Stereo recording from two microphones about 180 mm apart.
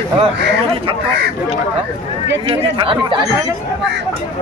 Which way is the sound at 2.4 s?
30° right (ahead or behind).